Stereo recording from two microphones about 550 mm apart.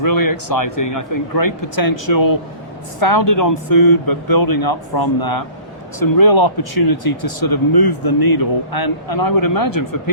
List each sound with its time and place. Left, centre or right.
0.0 s speech: left